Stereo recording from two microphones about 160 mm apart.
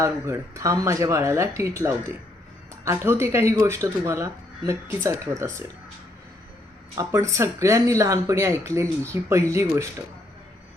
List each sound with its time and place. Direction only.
0.0 s speech: 20° right (ahead or behind)
6.9 s speech: 20° right (ahead or behind)